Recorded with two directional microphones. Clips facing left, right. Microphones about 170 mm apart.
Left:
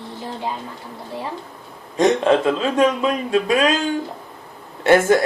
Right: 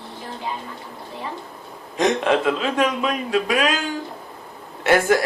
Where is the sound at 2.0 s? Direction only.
25° left (ahead or behind).